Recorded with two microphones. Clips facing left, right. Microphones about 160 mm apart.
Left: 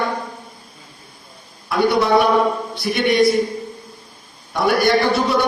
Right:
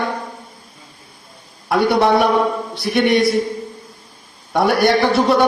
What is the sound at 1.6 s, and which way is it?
A man's voice, 60° right (ahead or behind).